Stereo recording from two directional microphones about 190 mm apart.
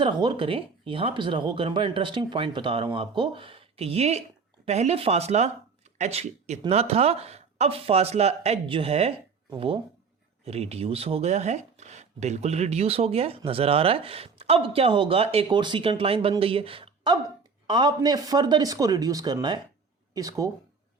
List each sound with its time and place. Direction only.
0.0 s speech: 25° right (ahead or behind)